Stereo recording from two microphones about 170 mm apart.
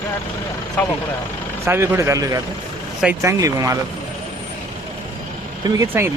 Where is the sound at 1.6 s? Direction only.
15° right (ahead or behind).